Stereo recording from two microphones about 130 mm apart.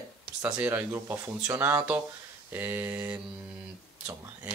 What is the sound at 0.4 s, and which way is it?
Speech, 10° right (ahead or behind).